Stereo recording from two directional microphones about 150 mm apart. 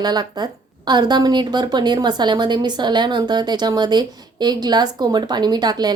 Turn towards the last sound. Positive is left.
turn(degrees=-25)  # may be behind; listen again after turning